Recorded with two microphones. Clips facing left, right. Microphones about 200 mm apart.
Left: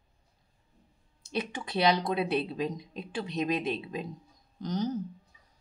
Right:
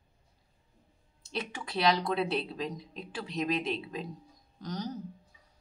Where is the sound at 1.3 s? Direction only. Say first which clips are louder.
Left 4 dB; 20° left (ahead or behind).